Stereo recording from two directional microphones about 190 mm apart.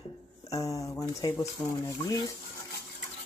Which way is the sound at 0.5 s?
15° left (ahead or behind).